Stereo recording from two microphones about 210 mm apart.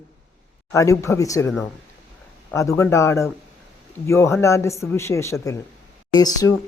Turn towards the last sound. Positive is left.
turn(degrees=20)  # may be behind; listen again after turning